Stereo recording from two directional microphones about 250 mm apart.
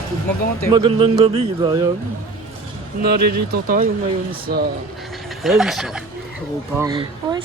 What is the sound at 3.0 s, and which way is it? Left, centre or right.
Speech, right.